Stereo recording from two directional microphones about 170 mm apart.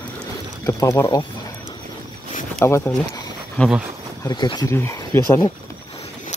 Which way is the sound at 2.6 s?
15° left (ahead or behind).